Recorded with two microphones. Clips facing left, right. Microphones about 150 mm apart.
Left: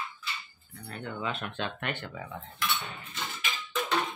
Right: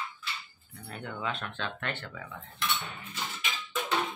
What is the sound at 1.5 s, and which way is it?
Speech, 15° left (ahead or behind).